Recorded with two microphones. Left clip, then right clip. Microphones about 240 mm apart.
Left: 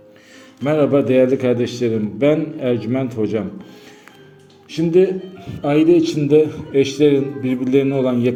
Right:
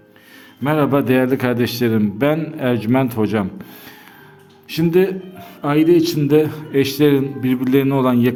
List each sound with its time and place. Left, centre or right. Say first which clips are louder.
0.6 s a man's voice: left 1 dB; right
4.7 s a man's voice: left 1 dB; right